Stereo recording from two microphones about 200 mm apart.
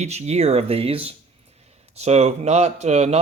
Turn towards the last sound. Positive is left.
turn(degrees=-35)  # may be behind; listen again after turning